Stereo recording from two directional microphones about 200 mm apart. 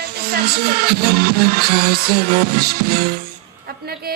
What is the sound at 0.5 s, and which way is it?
Music, 55° right (ahead or behind).